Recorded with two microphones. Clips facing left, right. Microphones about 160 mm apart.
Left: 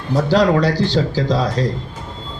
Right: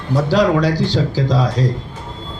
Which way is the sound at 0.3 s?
10° right (ahead or behind).